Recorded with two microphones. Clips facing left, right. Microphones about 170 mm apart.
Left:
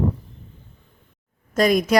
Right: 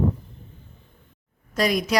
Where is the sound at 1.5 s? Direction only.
50° left (ahead or behind).